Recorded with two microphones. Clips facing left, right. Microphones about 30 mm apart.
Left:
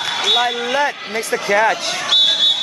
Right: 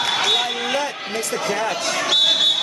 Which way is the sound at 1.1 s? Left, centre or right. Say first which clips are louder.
Left 5 dB; left.